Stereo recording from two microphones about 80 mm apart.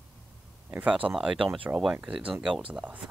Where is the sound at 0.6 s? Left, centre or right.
Centre.